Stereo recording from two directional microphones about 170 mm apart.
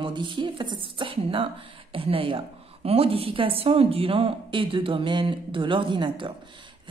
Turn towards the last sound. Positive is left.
turn(degrees=-30)  # may be behind; listen again after turning